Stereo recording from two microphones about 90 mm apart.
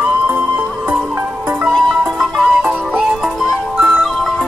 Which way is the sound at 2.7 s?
20° right (ahead or behind).